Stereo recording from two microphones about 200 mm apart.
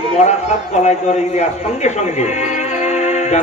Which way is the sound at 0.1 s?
35° left (ahead or behind).